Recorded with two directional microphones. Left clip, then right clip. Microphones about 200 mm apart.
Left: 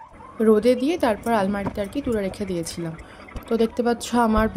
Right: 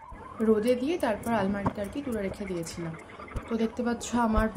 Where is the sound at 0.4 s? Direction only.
50° left (ahead or behind).